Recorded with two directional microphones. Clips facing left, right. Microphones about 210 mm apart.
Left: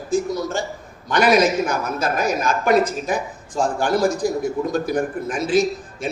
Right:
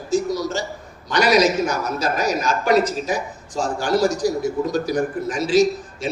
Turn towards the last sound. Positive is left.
turn(degrees=55)  # may be behind; listen again after turning